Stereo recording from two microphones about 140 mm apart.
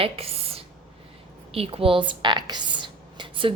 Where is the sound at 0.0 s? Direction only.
45° right (ahead or behind).